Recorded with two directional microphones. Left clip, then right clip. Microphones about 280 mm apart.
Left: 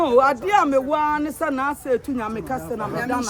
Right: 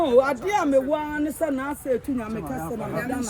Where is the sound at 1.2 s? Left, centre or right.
Left.